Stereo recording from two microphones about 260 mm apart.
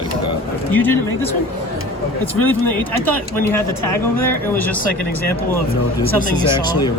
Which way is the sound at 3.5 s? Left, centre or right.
Centre.